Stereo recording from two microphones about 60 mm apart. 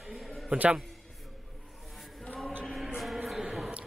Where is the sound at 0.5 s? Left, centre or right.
Centre.